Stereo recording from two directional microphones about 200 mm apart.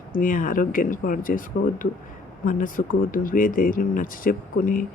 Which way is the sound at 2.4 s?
45° left (ahead or behind).